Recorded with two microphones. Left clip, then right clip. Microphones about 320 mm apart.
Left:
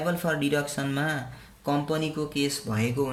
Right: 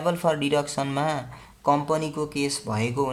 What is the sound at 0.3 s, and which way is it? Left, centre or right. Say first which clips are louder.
Speech: right 4 dB; centre.